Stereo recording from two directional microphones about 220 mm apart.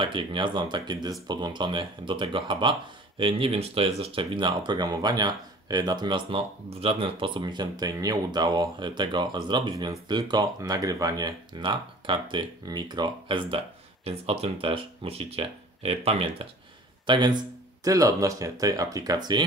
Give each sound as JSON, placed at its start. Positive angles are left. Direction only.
{"t": 0.0, "sound": "speech", "side_deg": -20}